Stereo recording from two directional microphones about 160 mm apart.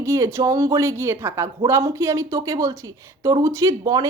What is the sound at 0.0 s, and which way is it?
A woman's voice, 20° right (ahead or behind).